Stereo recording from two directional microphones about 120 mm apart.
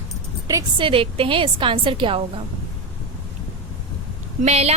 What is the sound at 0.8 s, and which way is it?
A woman's voice, 50° right (ahead or behind).